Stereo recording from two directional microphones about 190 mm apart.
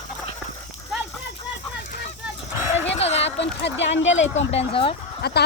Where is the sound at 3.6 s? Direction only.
70° left (ahead or behind).